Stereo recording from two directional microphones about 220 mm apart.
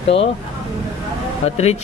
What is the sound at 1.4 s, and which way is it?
Speech, 30° left (ahead or behind).